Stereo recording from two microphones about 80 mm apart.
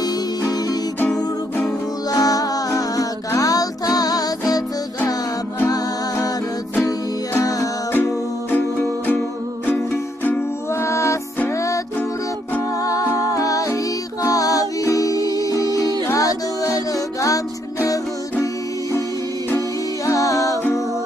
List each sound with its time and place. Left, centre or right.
0.0 s music: left
2.1 s music: left
7.9 s music: left
10.8 s music: left
12.8 s music: left
20.1 s music: left